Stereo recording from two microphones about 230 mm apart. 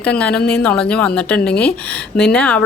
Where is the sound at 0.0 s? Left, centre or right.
Centre.